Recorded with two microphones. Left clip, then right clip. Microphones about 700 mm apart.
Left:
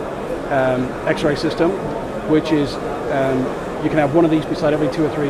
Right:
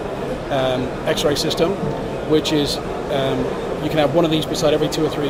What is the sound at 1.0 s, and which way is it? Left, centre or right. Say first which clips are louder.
Speech: even; left.